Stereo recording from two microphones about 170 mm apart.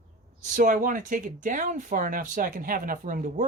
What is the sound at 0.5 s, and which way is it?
Speech, 50° right (ahead or behind).